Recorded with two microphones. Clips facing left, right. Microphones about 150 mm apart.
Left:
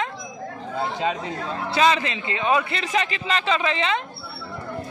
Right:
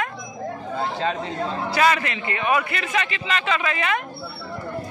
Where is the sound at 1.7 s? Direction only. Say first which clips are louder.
Left 1 dB; 20° left (ahead or behind).